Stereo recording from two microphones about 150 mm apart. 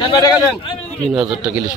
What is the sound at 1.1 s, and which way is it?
Speech, 5° right (ahead or behind).